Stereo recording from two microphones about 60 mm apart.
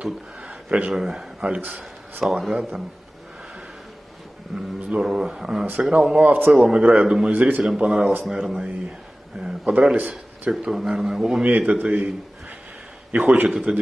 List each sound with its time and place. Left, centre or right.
0.0 s a sound: centre
0.9 s a man's voice: centre
1.6 s a man's voice: right
2.2 s speech: centre
4.6 s a man's voice: centre
6.2 s a man's voice: right
6.5 s a man's voice: centre
6.8 s a man's voice: right
7.6 s a man's voice: centre
9.9 s a sound: right
10.6 s a man's voice: centre
11.4 s a man's voice: right
13.1 s a man's voice: right
13.5 s speech: centre